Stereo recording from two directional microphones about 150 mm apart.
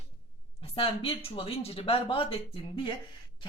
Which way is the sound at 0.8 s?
35° left (ahead or behind).